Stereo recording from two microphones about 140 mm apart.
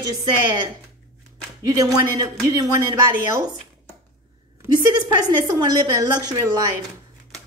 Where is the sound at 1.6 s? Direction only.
30° right (ahead or behind).